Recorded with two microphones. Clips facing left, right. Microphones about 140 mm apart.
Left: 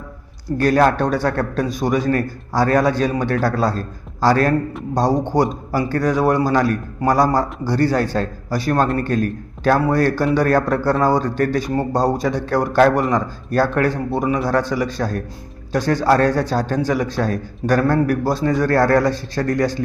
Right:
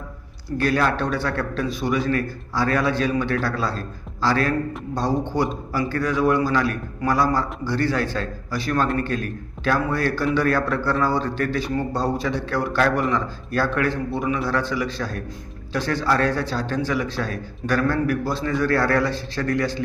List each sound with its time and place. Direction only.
0.6 s a man's voice: 45° left (ahead or behind)